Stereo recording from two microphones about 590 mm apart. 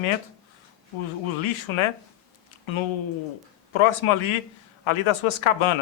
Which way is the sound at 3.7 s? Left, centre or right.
Left.